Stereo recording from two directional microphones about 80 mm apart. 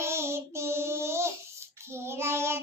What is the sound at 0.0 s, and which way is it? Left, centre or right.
Child singing, right.